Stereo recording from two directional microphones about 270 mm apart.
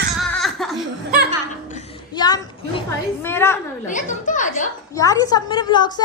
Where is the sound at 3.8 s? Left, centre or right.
Left.